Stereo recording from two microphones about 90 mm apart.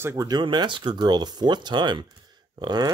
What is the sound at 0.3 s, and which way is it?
Speech, 55° right (ahead or behind).